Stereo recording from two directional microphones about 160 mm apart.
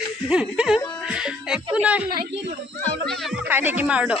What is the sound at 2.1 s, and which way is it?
Speech, 80° right.